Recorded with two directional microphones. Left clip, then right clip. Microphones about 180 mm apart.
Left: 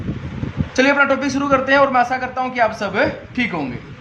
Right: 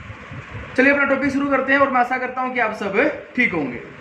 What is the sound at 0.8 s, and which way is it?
A man's voice, 55° left (ahead or behind).